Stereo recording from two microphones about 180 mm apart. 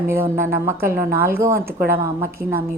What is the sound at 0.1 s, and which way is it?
A woman's voice, 15° right (ahead or behind).